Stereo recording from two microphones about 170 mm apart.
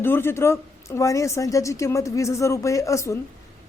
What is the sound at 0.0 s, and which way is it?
A woman's voice, 15° left (ahead or behind).